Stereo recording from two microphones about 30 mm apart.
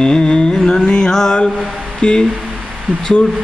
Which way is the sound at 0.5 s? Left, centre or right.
Centre.